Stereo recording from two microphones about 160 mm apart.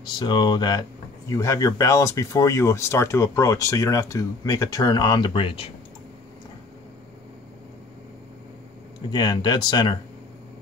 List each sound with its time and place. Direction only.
0.0 s speech: 25° left (ahead or behind)
9.1 s speech: 25° left (ahead or behind)